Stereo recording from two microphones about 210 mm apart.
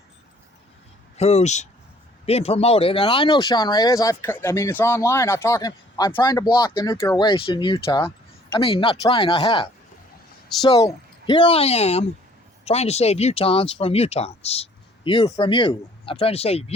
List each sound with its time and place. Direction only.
1.1 s speech: 30° left (ahead or behind)